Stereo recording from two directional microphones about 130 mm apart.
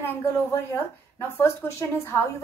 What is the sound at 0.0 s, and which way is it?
A woman's voice, 20° left (ahead or behind).